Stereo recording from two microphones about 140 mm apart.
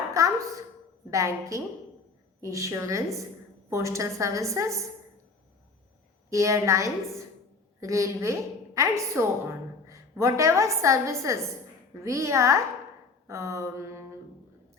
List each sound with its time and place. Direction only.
0.2 s a woman's voice: 25° right (ahead or behind)
6.3 s a woman's voice: 20° right (ahead or behind)
13.2 s a sound: 20° right (ahead or behind)